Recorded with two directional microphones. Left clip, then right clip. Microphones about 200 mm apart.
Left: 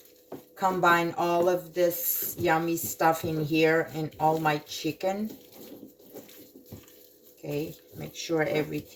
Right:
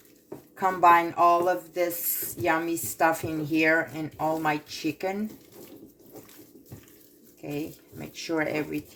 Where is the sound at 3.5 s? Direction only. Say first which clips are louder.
Right 1 dB; 45° right (ahead or behind).